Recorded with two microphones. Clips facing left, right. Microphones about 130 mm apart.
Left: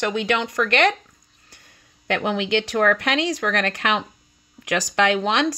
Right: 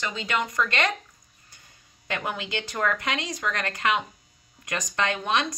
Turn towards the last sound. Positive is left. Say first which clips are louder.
# left 6 dB
turn(degrees=85)